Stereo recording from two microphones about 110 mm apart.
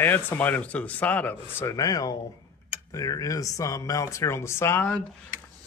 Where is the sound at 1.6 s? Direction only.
30° left (ahead or behind).